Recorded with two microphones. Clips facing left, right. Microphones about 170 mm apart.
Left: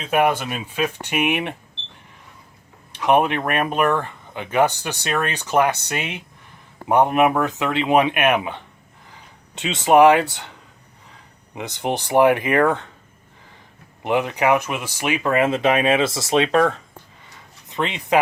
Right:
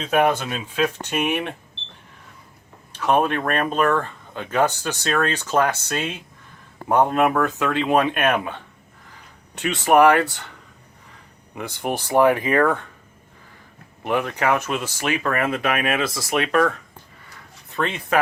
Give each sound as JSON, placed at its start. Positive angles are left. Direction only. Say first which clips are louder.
{"t": 0.0, "sound": "speech", "louder": "even", "side_deg": 10}
{"t": 2.9, "sound": "speech", "louder": "left 2 dB", "side_deg": 15}
{"t": 11.8, "sound": "speech", "louder": "left 1 dB", "side_deg": 20}
{"t": 14.0, "sound": "speech", "louder": "left 2 dB", "side_deg": 20}